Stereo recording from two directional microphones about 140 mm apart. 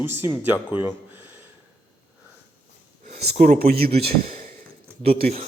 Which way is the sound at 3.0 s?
65° right (ahead or behind).